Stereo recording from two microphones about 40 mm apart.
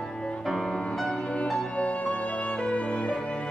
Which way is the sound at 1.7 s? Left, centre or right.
Left.